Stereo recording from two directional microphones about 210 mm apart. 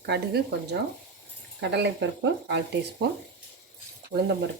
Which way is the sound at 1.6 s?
55° right (ahead or behind).